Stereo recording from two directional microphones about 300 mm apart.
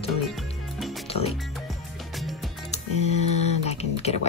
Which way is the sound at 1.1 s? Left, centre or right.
Centre.